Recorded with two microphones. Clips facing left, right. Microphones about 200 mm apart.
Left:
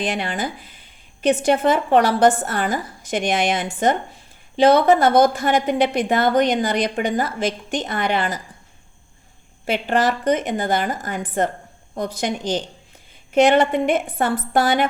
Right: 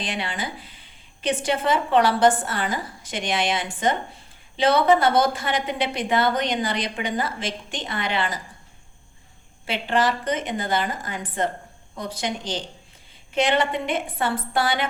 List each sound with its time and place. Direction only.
0.1 s a woman's voice: 45° left (ahead or behind)
9.6 s a woman's voice: 45° left (ahead or behind)